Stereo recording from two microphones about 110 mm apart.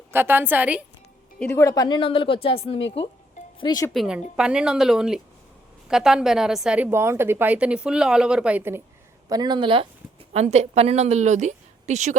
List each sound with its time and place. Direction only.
0.1 s speech: 20° right (ahead or behind)
1.5 s speech: 30° left (ahead or behind)
2.0 s speech: 50° left (ahead or behind)
3.4 s music: 90° left
3.9 s a woman's voice: 5° right (ahead or behind)
6.9 s speech: 25° right (ahead or behind)
9.3 s speech: 40° right (ahead or behind)
10.3 s a woman's voice: 80° right